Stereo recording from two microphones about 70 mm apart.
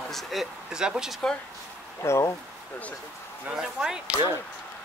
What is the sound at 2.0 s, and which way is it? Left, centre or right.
Speech, left.